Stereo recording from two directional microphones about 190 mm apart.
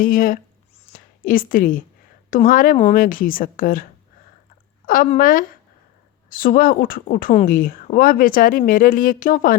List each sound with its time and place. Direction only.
0.0 s a woman's voice: 45° left (ahead or behind)
4.9 s speech: 50° left (ahead or behind)